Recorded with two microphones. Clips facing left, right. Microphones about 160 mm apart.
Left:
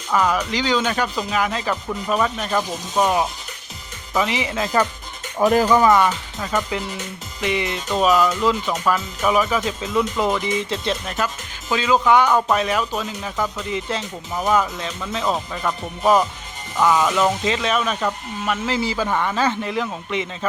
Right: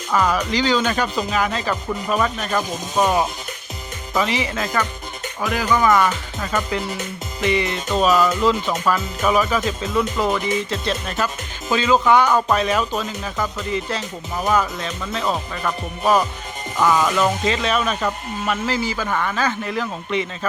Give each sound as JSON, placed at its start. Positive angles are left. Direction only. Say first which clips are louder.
{"t": 0.1, "sound": "speech", "louder": "even", "side_deg": 10}
{"t": 3.0, "sound": "speech", "louder": "right 1 dB", "side_deg": -5}
{"t": 4.1, "sound": "speech", "louder": "even", "side_deg": 15}
{"t": 5.4, "sound": "music", "louder": "left 5 dB", "side_deg": 40}
{"t": 6.1, "sound": "speech", "louder": "even", "side_deg": 10}
{"t": 8.6, "sound": "speech", "louder": "right 1 dB", "side_deg": 0}
{"t": 8.9, "sound": "speech", "louder": "even", "side_deg": 10}
{"t": 11.7, "sound": "speech", "louder": "right 1 dB", "side_deg": 10}
{"t": 18.6, "sound": "a man's voice", "louder": "left 1 dB", "side_deg": 25}